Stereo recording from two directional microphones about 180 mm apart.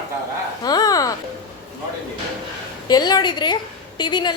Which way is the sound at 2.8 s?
20° left (ahead or behind).